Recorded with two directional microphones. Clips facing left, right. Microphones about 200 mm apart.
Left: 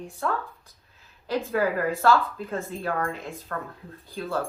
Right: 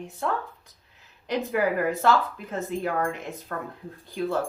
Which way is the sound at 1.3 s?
20° right (ahead or behind).